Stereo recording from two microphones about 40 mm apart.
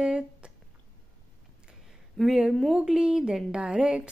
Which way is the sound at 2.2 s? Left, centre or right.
Centre.